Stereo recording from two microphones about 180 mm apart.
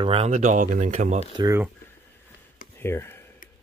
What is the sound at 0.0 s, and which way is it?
Speech, 35° right (ahead or behind).